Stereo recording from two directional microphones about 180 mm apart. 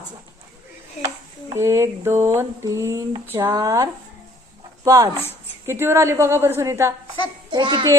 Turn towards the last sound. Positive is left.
turn(degrees=-25)  # may be behind; listen again after turning